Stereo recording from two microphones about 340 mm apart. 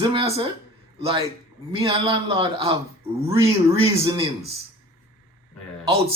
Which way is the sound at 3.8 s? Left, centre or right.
Centre.